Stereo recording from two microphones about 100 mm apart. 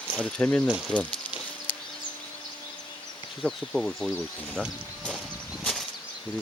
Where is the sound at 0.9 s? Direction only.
15° left (ahead or behind).